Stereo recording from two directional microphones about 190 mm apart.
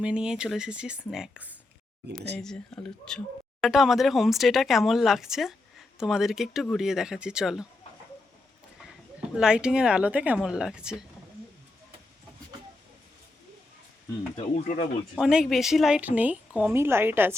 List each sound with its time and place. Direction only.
0.0 s speech: 5° right (ahead or behind)
2.0 s speech: 60° right (ahead or behind)
2.4 s speech: 5° left (ahead or behind)
9.3 s speech: 5° right (ahead or behind)
14.3 s speech: 40° left (ahead or behind)
15.1 s a woman's voice: 5° right (ahead or behind)